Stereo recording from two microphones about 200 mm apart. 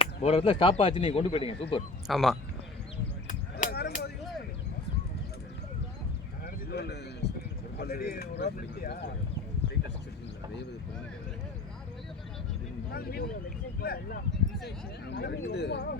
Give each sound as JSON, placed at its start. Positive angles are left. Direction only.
{"t": 0.0, "sound": "speech", "side_deg": 30}
{"t": 2.0, "sound": "speech", "side_deg": 0}
{"t": 3.2, "sound": "a sound", "side_deg": 45}
{"t": 6.4, "sound": "a sound", "side_deg": 55}
{"t": 7.8, "sound": "speech", "side_deg": 50}
{"t": 12.9, "sound": "speech", "side_deg": 50}